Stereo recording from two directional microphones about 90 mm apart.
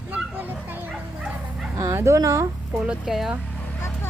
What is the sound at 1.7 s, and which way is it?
Speech, 35° right (ahead or behind).